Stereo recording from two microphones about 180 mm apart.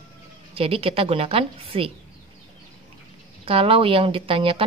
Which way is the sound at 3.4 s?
30° right (ahead or behind).